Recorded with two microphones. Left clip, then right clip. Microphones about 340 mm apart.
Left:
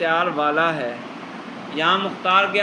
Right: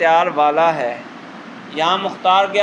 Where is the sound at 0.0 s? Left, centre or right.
Centre.